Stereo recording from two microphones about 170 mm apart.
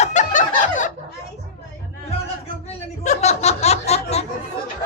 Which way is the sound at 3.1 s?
40° left (ahead or behind).